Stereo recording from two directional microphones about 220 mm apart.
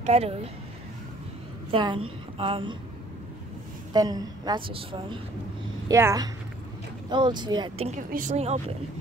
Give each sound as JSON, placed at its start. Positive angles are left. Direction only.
{"t": 0.0, "sound": "a woman's voice", "side_deg": -30}
{"t": 1.7, "sound": "a woman's voice", "side_deg": -20}
{"t": 3.9, "sound": "a woman's voice", "side_deg": -20}
{"t": 8.1, "sound": "speech", "side_deg": -35}